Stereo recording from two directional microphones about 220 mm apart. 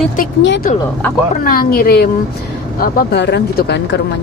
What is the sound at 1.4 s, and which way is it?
Speech, 40° left (ahead or behind).